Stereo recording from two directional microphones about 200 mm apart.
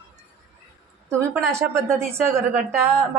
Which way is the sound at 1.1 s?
15° right (ahead or behind).